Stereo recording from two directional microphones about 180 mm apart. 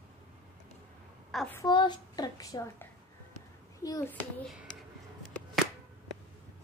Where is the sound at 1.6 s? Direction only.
25° left (ahead or behind).